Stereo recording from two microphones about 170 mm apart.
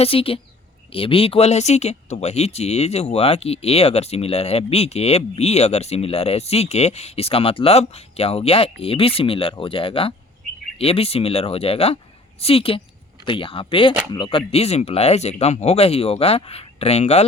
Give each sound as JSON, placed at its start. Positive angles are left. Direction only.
{"t": 0.0, "sound": "speech", "side_deg": 35}